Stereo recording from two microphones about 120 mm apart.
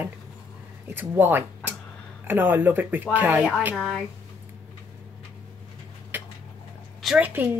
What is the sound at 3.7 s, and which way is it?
Speech, 5° right (ahead or behind).